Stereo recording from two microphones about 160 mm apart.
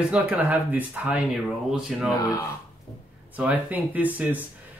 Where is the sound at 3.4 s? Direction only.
10° right (ahead or behind).